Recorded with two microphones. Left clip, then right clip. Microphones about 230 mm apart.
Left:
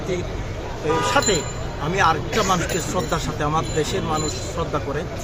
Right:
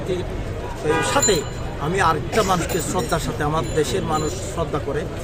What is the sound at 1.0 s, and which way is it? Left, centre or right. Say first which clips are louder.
Speech: left 1 dB; centre.